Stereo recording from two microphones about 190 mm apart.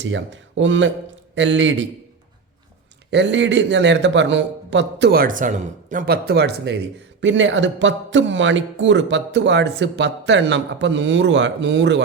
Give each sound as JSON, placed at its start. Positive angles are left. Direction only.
{"t": 0.0, "sound": "a man's voice", "side_deg": -75}
{"t": 3.1, "sound": "a man's voice", "side_deg": -65}